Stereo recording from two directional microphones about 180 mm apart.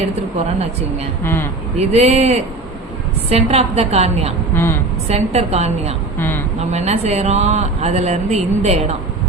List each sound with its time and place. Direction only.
1.2 s speech: 15° left (ahead or behind)
1.9 s speech: 35° right (ahead or behind)
4.5 s speech: 10° left (ahead or behind)
5.0 s speech: 35° right (ahead or behind)
6.1 s speech: 10° left (ahead or behind)
6.6 s speech: 40° right (ahead or behind)